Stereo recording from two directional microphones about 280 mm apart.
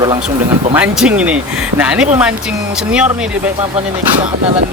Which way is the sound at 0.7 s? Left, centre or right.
Centre.